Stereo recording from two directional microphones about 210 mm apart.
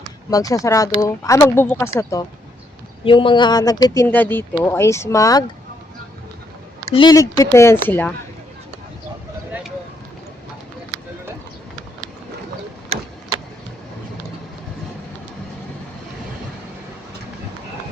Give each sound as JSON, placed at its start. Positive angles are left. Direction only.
{"t": 0.3, "sound": "speech", "side_deg": 15}
{"t": 6.9, "sound": "speech", "side_deg": 20}